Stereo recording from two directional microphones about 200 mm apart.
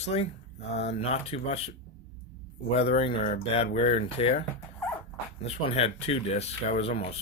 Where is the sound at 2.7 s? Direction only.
30° left (ahead or behind).